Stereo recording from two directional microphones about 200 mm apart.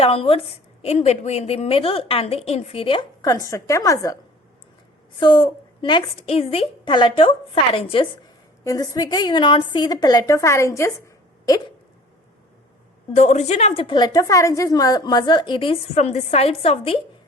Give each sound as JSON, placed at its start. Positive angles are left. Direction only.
{"t": 0.0, "sound": "a woman's voice", "side_deg": 30}
{"t": 5.2, "sound": "a woman's voice", "side_deg": 25}
{"t": 8.6, "sound": "a woman's voice", "side_deg": 15}
{"t": 13.1, "sound": "a woman's voice", "side_deg": 35}